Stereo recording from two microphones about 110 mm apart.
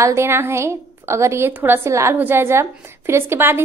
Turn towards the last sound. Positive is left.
turn(degrees=-20)  # may be behind; listen again after turning